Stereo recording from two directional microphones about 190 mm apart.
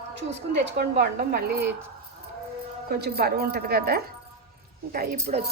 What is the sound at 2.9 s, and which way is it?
Speech, 55° right (ahead or behind).